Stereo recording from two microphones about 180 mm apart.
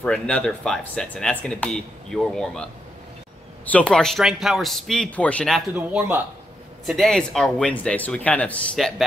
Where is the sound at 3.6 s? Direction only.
5° left (ahead or behind).